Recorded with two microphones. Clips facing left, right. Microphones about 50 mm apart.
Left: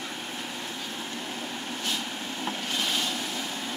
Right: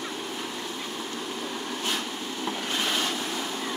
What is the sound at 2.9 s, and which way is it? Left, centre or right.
Waves, right.